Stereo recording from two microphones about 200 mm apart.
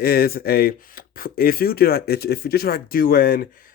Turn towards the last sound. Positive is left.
turn(degrees=45)  # may be behind; listen again after turning